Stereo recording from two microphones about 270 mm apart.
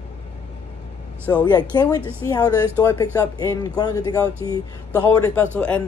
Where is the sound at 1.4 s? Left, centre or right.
Centre.